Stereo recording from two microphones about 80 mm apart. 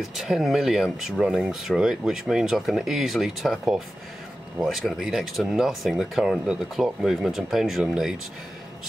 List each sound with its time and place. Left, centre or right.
0.2 s speech: centre
1.2 s speech: centre